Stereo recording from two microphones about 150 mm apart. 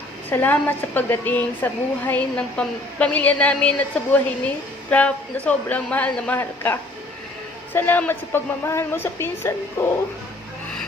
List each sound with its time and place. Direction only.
0.3 s a woman's voice: 15° left (ahead or behind)